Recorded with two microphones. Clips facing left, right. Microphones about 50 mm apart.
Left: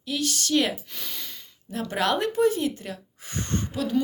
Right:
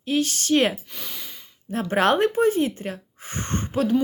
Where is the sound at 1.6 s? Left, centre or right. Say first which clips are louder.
Right 5 dB; right.